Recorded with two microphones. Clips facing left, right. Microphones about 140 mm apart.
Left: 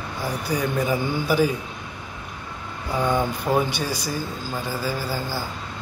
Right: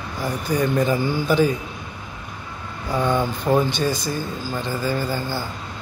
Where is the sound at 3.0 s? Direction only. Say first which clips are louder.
Right 1 dB; 10° left (ahead or behind).